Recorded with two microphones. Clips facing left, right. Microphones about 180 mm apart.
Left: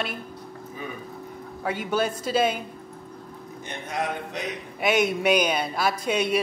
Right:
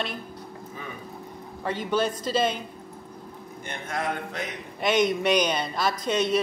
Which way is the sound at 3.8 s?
10° left (ahead or behind).